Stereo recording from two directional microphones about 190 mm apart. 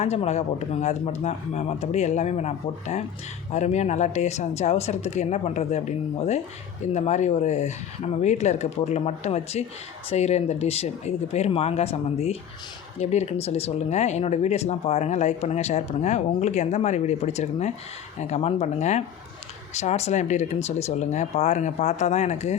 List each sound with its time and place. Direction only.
0.0 s speech: 35° left (ahead or behind)